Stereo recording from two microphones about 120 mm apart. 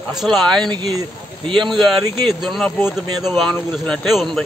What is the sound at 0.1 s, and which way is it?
Speech, centre (ahead or behind).